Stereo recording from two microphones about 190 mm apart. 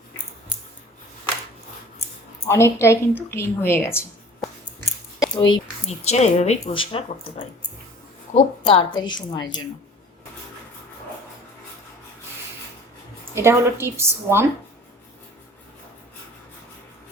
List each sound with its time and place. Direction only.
2.5 s a woman's voice: 15° left (ahead or behind)
5.2 s a sound: 25° left (ahead or behind)
6.1 s a woman's voice: 35° left (ahead or behind)
13.3 s a woman's voice: 15° right (ahead or behind)